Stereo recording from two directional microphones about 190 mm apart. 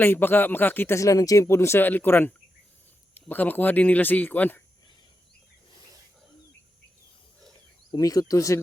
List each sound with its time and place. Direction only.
0.0 s speech: 10° left (ahead or behind)
7.9 s speech: 20° left (ahead or behind)